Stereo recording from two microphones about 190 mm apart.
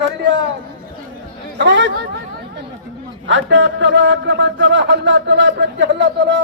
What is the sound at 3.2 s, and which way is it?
A man's voice, 80° right.